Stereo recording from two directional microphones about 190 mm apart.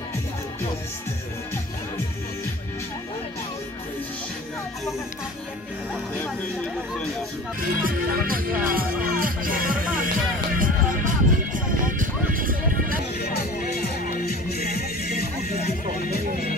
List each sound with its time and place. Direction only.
7.8 s speech: 50° right (ahead or behind)
8.7 s music: 45° right (ahead or behind)
13.2 s music: 55° left (ahead or behind)